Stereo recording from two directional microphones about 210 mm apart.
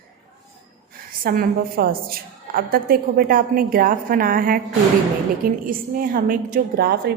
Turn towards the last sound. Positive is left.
turn(degrees=-50)  # may be behind; listen again after turning